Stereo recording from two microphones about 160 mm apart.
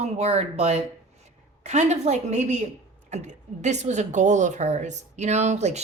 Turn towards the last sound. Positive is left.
turn(degrees=-45)  # may be behind; listen again after turning